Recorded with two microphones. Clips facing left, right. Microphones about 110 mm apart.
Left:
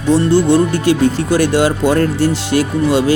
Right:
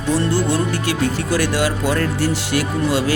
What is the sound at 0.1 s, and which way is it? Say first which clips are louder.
Speech: left 7 dB; 25° left (ahead or behind).